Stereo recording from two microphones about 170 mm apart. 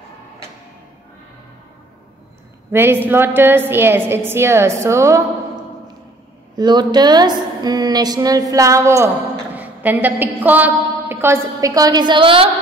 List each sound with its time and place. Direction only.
2.7 s a woman's voice: 15° right (ahead or behind)
6.5 s a woman's voice: 25° right (ahead or behind)